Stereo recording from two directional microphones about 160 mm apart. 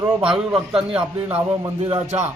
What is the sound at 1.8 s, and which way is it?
Speech, 40° right (ahead or behind).